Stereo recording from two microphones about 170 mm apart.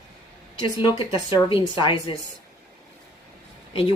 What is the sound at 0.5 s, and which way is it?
A woman's voice, 25° left (ahead or behind).